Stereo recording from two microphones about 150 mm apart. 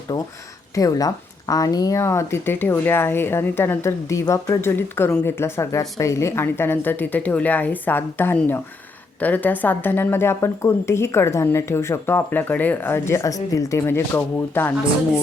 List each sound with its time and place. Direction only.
0.1 s a woman's voice: 25° left (ahead or behind)